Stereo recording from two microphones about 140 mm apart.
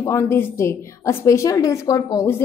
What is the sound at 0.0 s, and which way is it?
A woman's voice, 20° left (ahead or behind).